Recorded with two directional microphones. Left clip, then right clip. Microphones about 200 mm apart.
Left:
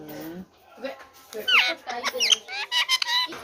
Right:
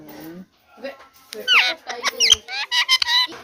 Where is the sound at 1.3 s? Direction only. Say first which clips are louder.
Right 4 dB; 15° right (ahead or behind).